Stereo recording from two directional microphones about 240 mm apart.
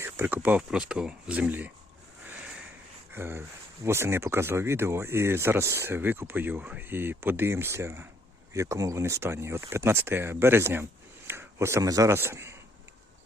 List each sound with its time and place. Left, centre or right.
0.0 s speech: centre
3.1 s a man's voice: centre